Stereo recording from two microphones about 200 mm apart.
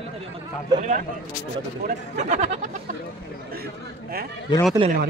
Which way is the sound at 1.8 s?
35° right (ahead or behind).